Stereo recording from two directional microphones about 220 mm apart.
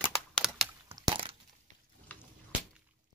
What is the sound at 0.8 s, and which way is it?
Crack, 15° right (ahead or behind).